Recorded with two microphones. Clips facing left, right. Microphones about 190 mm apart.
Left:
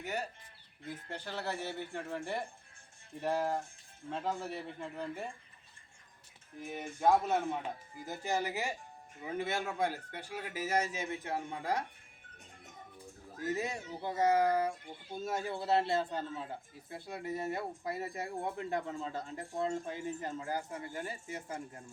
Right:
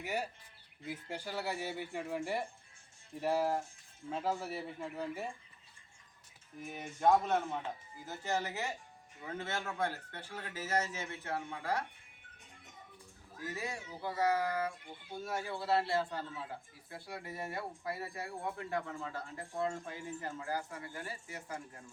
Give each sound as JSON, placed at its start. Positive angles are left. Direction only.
{"t": 0.0, "sound": "speech", "side_deg": -10}
{"t": 6.6, "sound": "speech", "side_deg": 0}
{"t": 13.4, "sound": "speech", "side_deg": 20}